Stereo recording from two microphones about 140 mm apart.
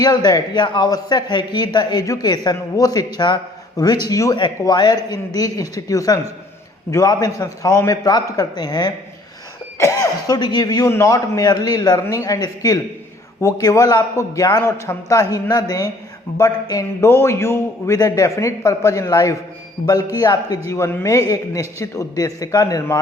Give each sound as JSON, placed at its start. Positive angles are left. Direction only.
{"t": 0.0, "sound": "a man's voice", "side_deg": 30}